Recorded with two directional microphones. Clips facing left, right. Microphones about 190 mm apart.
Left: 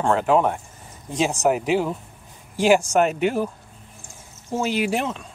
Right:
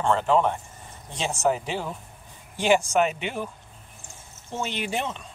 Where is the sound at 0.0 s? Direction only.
10° left (ahead or behind).